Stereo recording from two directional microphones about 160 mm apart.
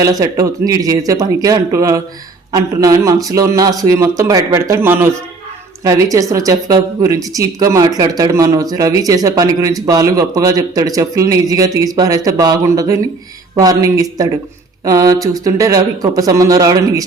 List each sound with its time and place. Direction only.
0.0 s speech: 20° right (ahead or behind)